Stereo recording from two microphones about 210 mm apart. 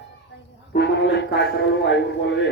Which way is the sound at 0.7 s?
55° left (ahead or behind).